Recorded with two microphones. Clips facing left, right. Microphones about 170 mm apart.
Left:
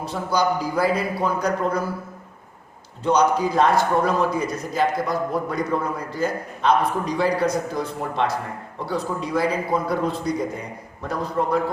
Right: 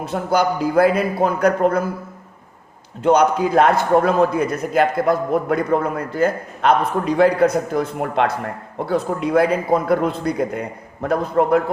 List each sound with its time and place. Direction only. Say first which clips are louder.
0.1 s a man's voice: right 3 dB; 55° right (ahead or behind)
3.0 s a man's voice: right 4 dB; 55° right (ahead or behind)